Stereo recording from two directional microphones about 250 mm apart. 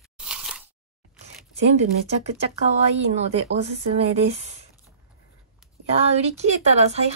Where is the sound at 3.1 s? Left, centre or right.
Right.